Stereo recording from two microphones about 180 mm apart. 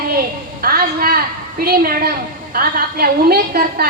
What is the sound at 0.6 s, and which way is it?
A woman's voice, 55° right (ahead or behind).